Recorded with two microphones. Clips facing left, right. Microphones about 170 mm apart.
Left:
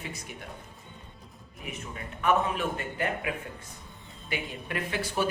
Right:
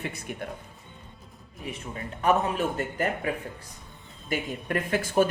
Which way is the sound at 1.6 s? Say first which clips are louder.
Right 3 dB; 30° right (ahead or behind).